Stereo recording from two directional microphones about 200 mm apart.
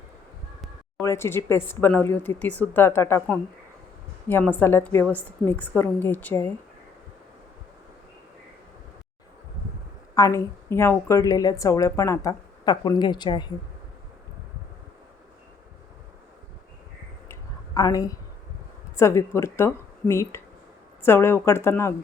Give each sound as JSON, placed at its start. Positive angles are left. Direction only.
{"t": 1.0, "sound": "a woman's voice", "side_deg": 15}
{"t": 10.2, "sound": "a woman's voice", "side_deg": 15}
{"t": 17.7, "sound": "a woman's voice", "side_deg": 15}